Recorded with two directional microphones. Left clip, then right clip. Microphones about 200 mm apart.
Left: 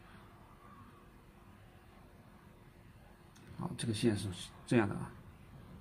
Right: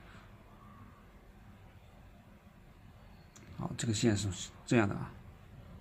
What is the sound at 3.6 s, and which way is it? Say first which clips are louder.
Speech: right 2 dB; 20° right (ahead or behind).